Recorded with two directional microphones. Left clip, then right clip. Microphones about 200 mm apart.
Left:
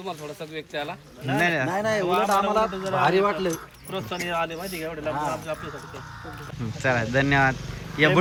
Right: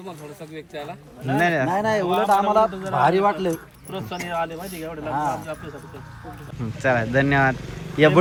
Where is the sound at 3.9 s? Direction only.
Centre (ahead or behind).